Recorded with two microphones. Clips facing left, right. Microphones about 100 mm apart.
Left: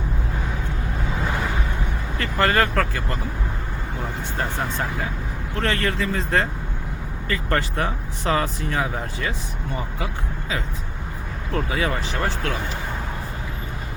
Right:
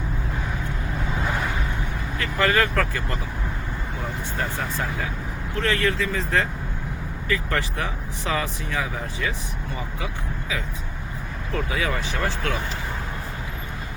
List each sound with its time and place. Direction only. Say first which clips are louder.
2.1 s speech: left 1 dB; 35° left (ahead or behind)
5.5 s speech: even; 35° left (ahead or behind)
11.5 s speech: left 2 dB; 35° left (ahead or behind)